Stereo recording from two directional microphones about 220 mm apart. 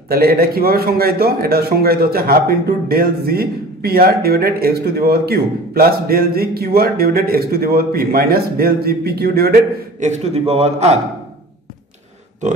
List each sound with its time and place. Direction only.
0.1 s a man's voice: 45° right (ahead or behind)